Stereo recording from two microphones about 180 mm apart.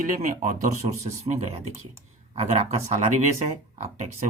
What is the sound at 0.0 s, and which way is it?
Speech, 50° right (ahead or behind).